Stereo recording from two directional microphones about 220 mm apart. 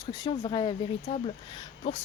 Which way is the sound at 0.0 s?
20° left (ahead or behind).